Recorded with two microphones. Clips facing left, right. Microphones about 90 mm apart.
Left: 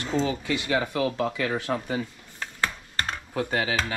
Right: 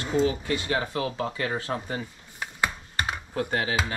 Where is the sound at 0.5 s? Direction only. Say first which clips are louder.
Left 1 dB; 25° right (ahead or behind).